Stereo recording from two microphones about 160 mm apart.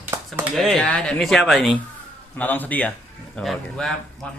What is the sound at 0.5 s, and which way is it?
Speech, 5° left (ahead or behind).